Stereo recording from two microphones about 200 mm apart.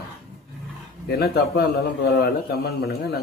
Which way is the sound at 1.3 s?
50° left (ahead or behind).